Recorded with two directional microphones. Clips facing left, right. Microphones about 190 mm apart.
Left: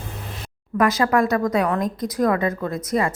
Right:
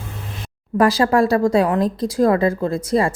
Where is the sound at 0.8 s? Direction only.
30° right (ahead or behind).